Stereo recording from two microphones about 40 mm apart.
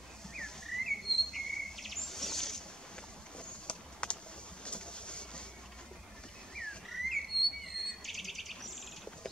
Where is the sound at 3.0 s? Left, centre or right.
Left.